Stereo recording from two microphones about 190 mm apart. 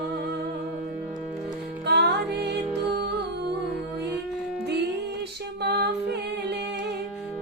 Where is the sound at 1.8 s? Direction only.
60° right (ahead or behind).